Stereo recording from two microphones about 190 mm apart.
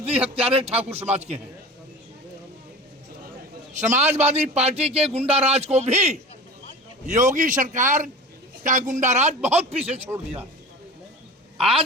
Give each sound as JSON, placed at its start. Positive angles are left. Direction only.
{"t": 0.0, "sound": "a man's voice", "side_deg": -30}
{"t": 3.7, "sound": "a man's voice", "side_deg": -40}